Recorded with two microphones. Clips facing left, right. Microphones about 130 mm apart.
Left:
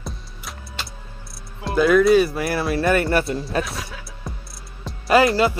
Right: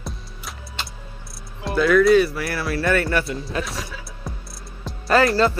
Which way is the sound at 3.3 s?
Centre (ahead or behind).